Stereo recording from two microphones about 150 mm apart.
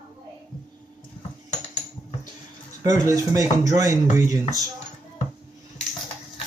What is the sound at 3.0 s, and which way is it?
Speech, 20° right (ahead or behind).